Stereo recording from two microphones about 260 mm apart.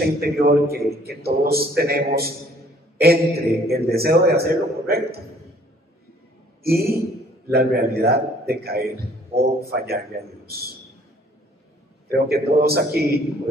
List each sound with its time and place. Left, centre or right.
0.0 s a man's voice: right
6.6 s a man's voice: right
12.3 s a man's voice: right